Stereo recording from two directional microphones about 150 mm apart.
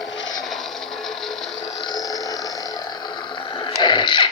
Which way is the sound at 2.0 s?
25° left (ahead or behind).